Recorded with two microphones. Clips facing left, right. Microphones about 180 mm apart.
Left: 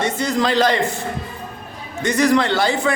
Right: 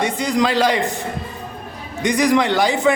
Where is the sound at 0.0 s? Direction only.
15° right (ahead or behind).